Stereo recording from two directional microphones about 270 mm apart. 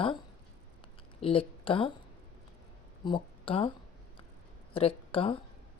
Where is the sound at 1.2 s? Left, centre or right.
Centre.